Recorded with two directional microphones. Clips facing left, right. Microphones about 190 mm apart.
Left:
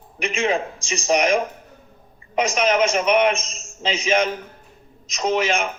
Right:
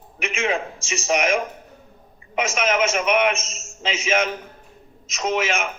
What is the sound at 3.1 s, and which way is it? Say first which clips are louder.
Speech: left 2 dB; 35° left (ahead or behind).